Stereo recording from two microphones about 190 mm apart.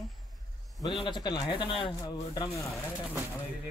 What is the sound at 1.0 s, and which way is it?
Speech, 20° left (ahead or behind).